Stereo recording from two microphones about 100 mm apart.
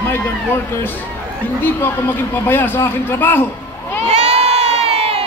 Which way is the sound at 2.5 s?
20° left (ahead or behind).